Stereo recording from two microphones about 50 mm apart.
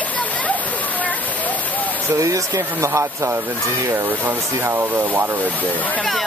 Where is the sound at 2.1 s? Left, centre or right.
Right.